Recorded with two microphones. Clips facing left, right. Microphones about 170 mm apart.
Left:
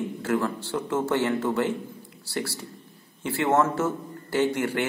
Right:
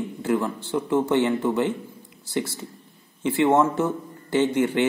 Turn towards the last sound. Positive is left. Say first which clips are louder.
# right 3 dB
turn(degrees=-20)  # may be behind; listen again after turning